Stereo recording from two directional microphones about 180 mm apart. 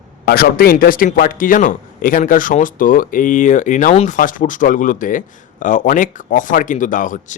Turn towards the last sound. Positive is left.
turn(degrees=45)  # may be behind; listen again after turning